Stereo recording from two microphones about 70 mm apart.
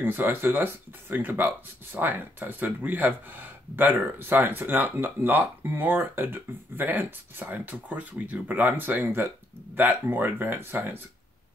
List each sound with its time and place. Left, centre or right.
0.0 s speech: right